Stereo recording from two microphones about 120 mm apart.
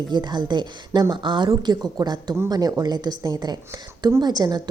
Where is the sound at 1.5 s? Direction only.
30° right (ahead or behind).